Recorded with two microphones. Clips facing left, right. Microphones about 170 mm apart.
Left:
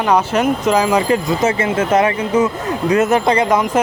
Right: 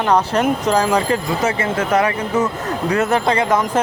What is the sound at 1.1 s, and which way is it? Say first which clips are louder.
Speech: left 3 dB; 20° left (ahead or behind).